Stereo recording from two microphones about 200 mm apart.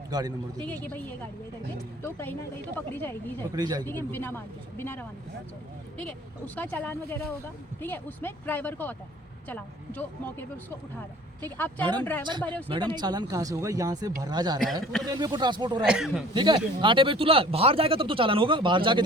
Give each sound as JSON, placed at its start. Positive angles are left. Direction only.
{"t": 0.1, "sound": "speech", "side_deg": -20}
{"t": 0.6, "sound": "speech", "side_deg": 10}
{"t": 3.5, "sound": "speech", "side_deg": -20}
{"t": 3.8, "sound": "speech", "side_deg": 10}
{"t": 11.4, "sound": "speech", "side_deg": 10}
{"t": 12.7, "sound": "speech", "side_deg": -25}
{"t": 14.6, "sound": "a man's voice", "side_deg": 0}
{"t": 15.0, "sound": "speech", "side_deg": -20}
{"t": 15.8, "sound": "a man's voice", "side_deg": 0}
{"t": 16.3, "sound": "speech", "side_deg": -25}